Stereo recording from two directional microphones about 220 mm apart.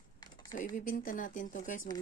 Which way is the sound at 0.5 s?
35° left (ahead or behind).